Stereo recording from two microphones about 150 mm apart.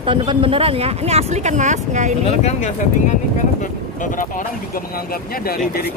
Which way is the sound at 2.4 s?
50° left (ahead or behind).